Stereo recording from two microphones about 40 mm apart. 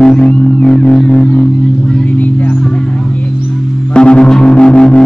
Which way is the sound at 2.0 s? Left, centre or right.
Left.